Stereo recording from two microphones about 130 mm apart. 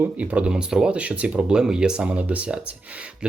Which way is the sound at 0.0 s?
10° right (ahead or behind).